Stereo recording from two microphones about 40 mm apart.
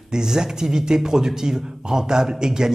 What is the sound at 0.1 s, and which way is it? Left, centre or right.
Speech, centre.